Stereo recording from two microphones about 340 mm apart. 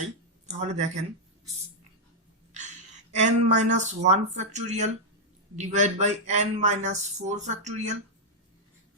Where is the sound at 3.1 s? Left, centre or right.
Right.